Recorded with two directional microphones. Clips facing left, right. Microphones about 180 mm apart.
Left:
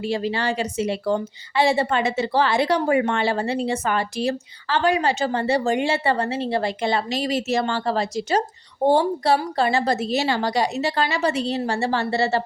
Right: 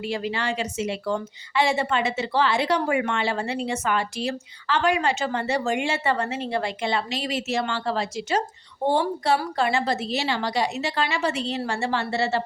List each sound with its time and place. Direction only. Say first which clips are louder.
0.0 s a woman's voice: left 4 dB; 30° left (ahead or behind)